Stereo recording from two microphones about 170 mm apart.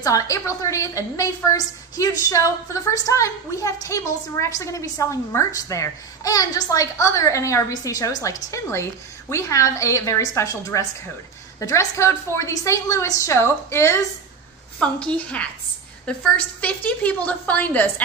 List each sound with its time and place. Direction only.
0.0 s a woman's voice: 20° left (ahead or behind)